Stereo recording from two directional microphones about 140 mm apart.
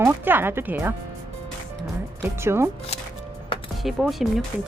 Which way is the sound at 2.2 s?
20° right (ahead or behind).